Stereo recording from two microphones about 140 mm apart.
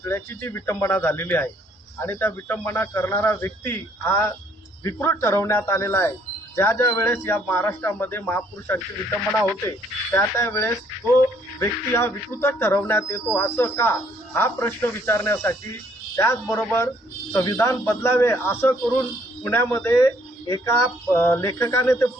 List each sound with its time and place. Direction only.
0.0 s speech: 20° left (ahead or behind)